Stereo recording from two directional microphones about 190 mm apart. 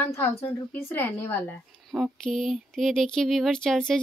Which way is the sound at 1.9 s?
Centre (ahead or behind).